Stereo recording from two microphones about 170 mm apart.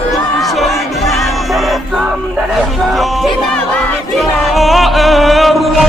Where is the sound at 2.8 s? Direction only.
Centre (ahead or behind).